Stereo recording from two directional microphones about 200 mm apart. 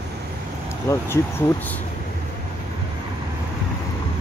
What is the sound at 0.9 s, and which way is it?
Speech, 15° left (ahead or behind).